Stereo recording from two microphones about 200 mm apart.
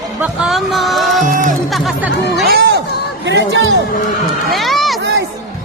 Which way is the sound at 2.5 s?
55° right (ahead or behind).